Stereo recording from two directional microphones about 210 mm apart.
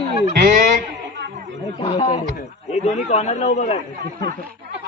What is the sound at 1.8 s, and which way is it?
A man's voice, 30° left (ahead or behind).